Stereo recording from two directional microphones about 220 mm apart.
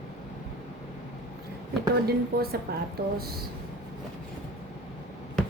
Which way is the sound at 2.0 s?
45° right (ahead or behind).